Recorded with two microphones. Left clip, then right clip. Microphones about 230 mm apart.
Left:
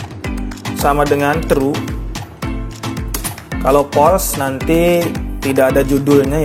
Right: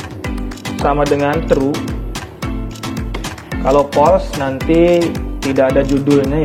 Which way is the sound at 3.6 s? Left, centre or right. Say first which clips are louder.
Even; left.